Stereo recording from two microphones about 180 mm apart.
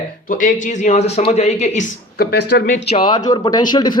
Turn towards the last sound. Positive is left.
turn(degrees=25)  # may be behind; listen again after turning